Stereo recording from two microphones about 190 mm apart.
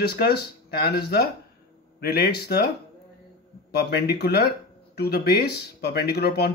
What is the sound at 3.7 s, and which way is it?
Speech, 60° left (ahead or behind).